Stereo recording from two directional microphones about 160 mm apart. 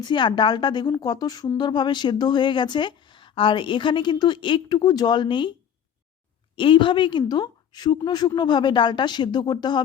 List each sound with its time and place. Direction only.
0.0 s a woman's voice: 30° left (ahead or behind)
6.6 s a woman's voice: 30° left (ahead or behind)